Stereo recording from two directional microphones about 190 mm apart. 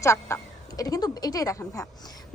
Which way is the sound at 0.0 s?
15° left (ahead or behind).